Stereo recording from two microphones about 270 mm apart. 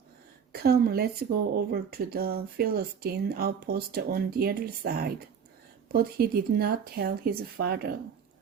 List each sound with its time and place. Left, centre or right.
0.5 s speech: right